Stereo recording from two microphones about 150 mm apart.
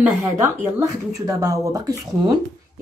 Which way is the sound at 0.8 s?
25° right (ahead or behind).